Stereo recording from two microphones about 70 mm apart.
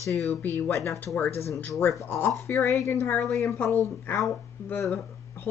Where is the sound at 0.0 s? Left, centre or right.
Left.